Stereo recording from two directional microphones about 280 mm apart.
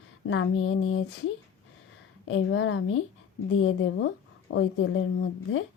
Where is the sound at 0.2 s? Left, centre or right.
Left.